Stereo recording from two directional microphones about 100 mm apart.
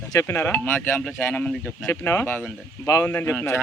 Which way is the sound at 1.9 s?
25° left (ahead or behind).